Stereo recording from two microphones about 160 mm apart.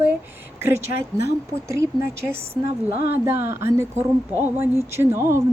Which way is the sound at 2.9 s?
65° left (ahead or behind).